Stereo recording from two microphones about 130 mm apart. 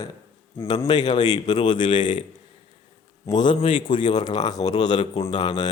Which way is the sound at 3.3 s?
35° left (ahead or behind).